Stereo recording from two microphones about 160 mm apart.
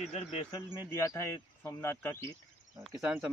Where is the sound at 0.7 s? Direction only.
20° left (ahead or behind).